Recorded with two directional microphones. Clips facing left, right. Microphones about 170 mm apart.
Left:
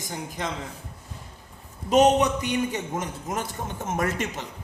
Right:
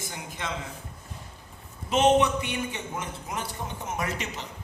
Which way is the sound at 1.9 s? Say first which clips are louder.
Left 2 dB; 40° left (ahead or behind).